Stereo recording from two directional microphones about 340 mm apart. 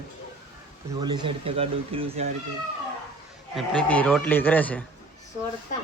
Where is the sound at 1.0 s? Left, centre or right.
Centre.